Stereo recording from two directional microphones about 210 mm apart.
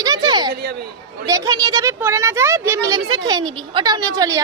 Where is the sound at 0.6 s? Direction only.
50° right (ahead or behind).